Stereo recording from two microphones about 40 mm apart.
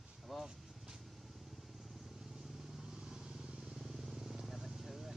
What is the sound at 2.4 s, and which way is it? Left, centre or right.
Vehicle, centre.